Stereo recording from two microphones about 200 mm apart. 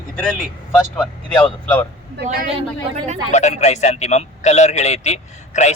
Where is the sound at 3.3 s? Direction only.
35° left (ahead or behind).